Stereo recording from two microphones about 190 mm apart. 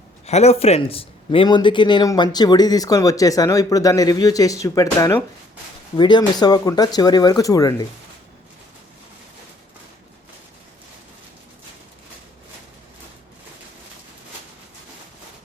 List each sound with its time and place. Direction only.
0.3 s speech: 35° left (ahead or behind); by 7.9 s 20° left (ahead or behind)